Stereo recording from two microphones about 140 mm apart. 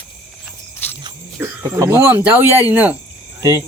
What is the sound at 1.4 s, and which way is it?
Cricket, 15° right (ahead or behind).